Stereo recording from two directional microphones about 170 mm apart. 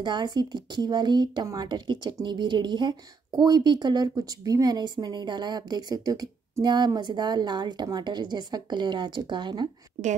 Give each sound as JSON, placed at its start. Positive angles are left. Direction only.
{"t": 0.0, "sound": "speech", "side_deg": -25}